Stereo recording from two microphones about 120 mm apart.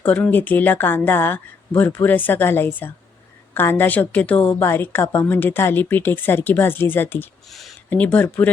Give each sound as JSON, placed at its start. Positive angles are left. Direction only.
{"t": 0.0, "sound": "speech", "side_deg": 15}